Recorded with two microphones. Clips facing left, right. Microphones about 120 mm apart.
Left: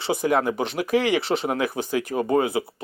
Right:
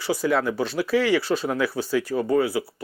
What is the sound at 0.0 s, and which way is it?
Speech, 20° left (ahead or behind).